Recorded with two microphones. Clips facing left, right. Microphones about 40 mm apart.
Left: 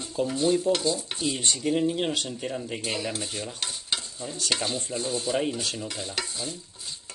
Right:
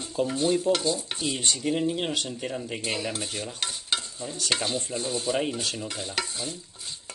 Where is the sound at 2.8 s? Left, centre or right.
Right.